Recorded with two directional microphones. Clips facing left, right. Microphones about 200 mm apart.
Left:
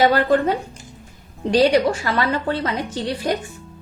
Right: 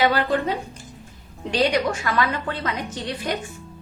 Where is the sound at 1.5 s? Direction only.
30° left (ahead or behind).